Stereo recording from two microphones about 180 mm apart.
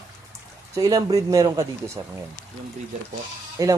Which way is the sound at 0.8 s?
20° right (ahead or behind).